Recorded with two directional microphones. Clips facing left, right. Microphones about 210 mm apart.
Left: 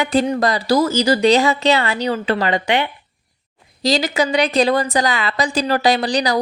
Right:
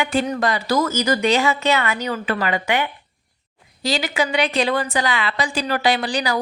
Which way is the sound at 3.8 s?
40° left (ahead or behind).